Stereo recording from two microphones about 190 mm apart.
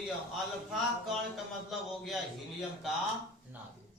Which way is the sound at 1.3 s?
Centre (ahead or behind).